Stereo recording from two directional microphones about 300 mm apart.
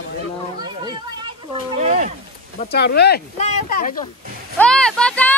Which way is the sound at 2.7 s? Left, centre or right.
Left.